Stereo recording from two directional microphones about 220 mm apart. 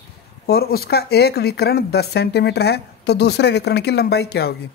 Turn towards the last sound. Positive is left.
turn(degrees=45)  # may be behind; listen again after turning